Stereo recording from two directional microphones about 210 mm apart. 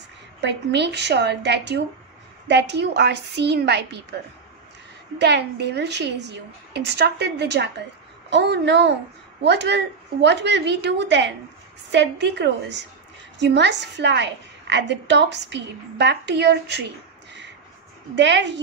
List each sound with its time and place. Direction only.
0.4 s a woman's voice: 55° right (ahead or behind)
5.2 s a woman's voice: 55° right (ahead or behind)
18.1 s a woman's voice: 55° right (ahead or behind)